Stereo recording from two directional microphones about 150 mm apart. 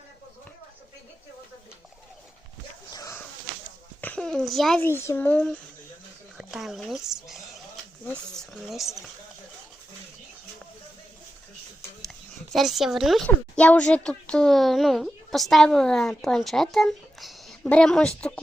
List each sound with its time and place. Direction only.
2.9 s a sound: 20° left (ahead or behind)
4.0 s speech: 5° left (ahead or behind)
4.8 s speech: 15° left (ahead or behind); by 9.0 s centre (ahead or behind)
12.5 s speech: centre (ahead or behind)